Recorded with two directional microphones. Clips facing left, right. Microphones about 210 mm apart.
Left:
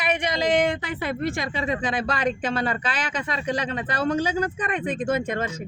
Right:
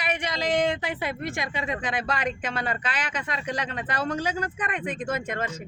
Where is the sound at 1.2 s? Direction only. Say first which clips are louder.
Left 4 dB; 35° left (ahead or behind).